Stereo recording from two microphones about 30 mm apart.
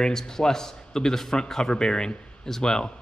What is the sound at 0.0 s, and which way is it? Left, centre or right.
A man's voice, left.